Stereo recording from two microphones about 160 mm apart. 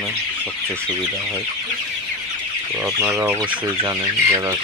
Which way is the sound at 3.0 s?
15° right (ahead or behind).